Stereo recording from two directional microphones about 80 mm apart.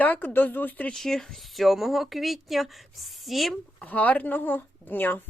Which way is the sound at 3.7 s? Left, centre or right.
Centre.